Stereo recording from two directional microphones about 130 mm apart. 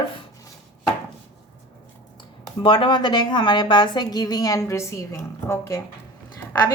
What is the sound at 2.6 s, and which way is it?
A woman's voice, 40° left (ahead or behind).